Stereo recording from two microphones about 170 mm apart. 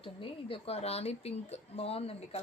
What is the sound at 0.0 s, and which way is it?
Speech, 30° left (ahead or behind).